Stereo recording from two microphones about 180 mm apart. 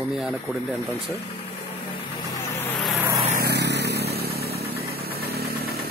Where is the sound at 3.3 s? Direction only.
65° right (ahead or behind).